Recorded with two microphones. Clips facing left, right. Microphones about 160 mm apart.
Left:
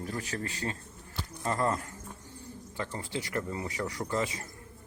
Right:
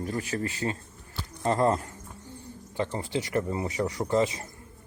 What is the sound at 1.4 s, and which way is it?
Speech, 25° right (ahead or behind).